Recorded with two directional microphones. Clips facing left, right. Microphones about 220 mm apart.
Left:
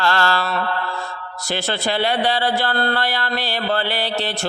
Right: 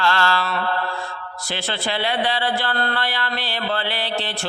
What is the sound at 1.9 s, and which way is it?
Speech, 40° left (ahead or behind).